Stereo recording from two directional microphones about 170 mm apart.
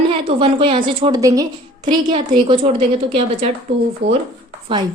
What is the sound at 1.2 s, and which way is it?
A woman's voice, 20° right (ahead or behind).